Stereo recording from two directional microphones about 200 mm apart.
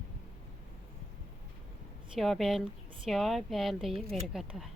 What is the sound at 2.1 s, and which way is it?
Speech, centre (ahead or behind).